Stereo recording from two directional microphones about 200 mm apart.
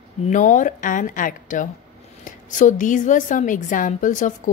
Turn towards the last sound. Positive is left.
turn(degrees=40)  # may be behind; listen again after turning